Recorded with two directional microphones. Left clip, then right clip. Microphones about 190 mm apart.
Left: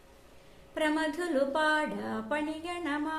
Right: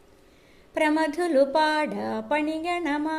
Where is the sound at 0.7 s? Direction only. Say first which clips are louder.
Right 7 dB; 35° right (ahead or behind).